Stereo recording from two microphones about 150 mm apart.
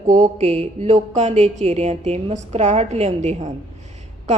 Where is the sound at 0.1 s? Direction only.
50° right (ahead or behind).